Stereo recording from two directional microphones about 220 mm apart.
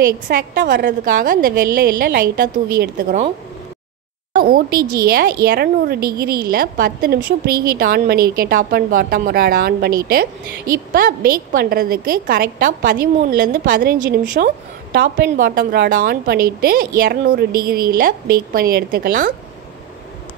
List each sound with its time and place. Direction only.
0.0 s a woman's voice: 45° right (ahead or behind)
4.3 s a woman's voice: 40° right (ahead or behind)